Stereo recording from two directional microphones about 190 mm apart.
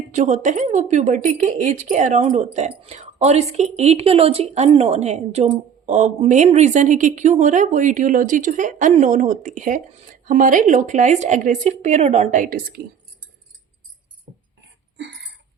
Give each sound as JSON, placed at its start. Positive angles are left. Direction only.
{"t": 0.1, "sound": "a woman's voice", "side_deg": -40}